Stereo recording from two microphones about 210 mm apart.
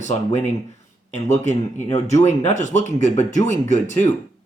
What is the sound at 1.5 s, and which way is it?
Speech, 35° left (ahead or behind).